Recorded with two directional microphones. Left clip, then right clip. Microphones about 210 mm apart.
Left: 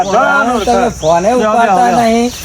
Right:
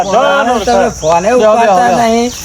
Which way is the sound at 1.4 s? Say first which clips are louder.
Right 2 dB; 40° right (ahead or behind).